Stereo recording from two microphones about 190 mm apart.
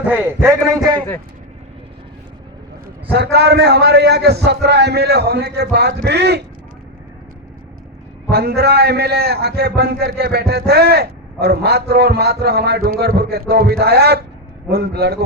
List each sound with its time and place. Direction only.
0.1 s a man's voice: 15° right (ahead or behind)
3.1 s a man's voice: 60° right (ahead or behind)
8.3 s a man's voice: 60° right (ahead or behind)